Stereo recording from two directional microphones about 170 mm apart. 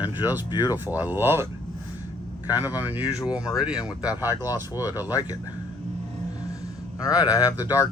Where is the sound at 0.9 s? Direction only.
10° right (ahead or behind).